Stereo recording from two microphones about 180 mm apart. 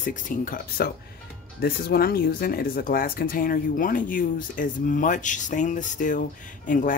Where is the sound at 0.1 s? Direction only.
50° left (ahead or behind).